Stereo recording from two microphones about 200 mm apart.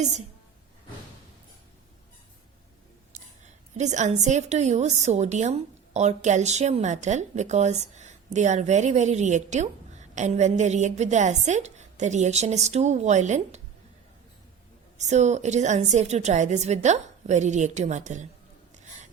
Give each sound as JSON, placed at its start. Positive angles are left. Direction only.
{"t": 3.1, "sound": "a woman's voice", "side_deg": -35}
{"t": 14.9, "sound": "a woman's voice", "side_deg": -35}